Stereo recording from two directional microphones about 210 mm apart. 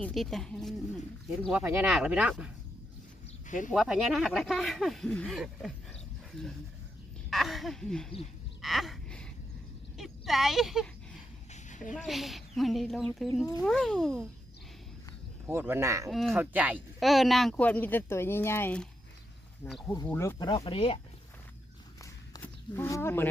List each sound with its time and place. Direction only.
0.0 s speech: centre (ahead or behind)
3.4 s a sound: 35° left (ahead or behind)
3.7 s speech: centre (ahead or behind)
8.6 s a sound: centre (ahead or behind)
10.0 s speech: centre (ahead or behind)
11.5 s a sound: 35° left (ahead or behind)
11.9 s speech: centre (ahead or behind)
15.4 s speech: 10° right (ahead or behind)
16.0 s speech: centre (ahead or behind)
19.9 s speech: 15° left (ahead or behind)
20.5 s speech: 25° left (ahead or behind)
22.0 s walk: 15° left (ahead or behind)